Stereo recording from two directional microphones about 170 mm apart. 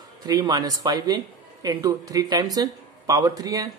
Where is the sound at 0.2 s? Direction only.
25° right (ahead or behind).